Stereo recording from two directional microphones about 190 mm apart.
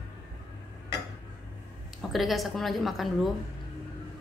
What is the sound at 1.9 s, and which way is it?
A woman's voice, centre (ahead or behind).